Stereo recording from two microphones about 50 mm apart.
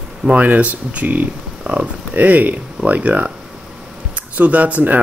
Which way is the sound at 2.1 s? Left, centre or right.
Right.